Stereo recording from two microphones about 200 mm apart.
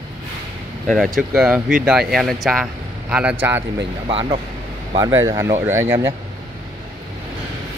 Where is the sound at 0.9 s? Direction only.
Centre (ahead or behind).